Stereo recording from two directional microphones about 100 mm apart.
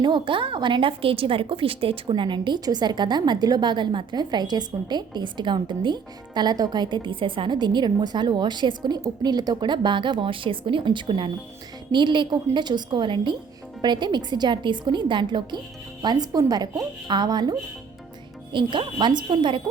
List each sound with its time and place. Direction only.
0.0 s a woman's voice: 55° right (ahead or behind)